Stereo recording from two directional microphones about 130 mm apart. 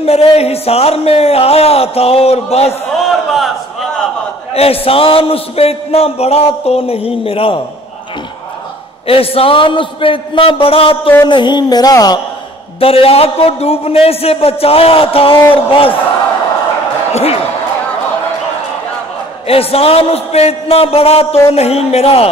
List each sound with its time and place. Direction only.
0.0 s a man's voice: 50° left (ahead or behind)
4.6 s a man's voice: 45° left (ahead or behind)
9.0 s a man's voice: 45° left (ahead or behind)
11.2 s a sound: 35° left (ahead or behind)
12.8 s a man's voice: 45° left (ahead or behind)
17.1 s speech: 50° left (ahead or behind)
19.4 s a man's voice: 50° left (ahead or behind)